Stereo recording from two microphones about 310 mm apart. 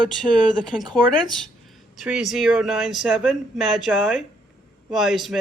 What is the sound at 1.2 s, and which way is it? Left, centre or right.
Speech, centre.